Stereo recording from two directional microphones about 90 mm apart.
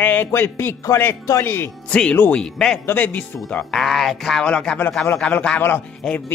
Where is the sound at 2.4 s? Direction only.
5° left (ahead or behind).